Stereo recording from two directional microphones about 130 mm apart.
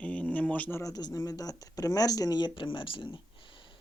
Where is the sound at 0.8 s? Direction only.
30° left (ahead or behind).